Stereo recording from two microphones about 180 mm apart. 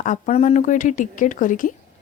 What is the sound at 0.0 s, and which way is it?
A woman's voice, 40° left (ahead or behind).